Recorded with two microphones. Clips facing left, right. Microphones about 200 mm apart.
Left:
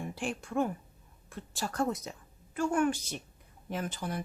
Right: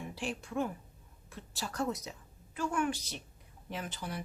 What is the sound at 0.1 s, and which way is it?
A woman's voice, 50° left (ahead or behind).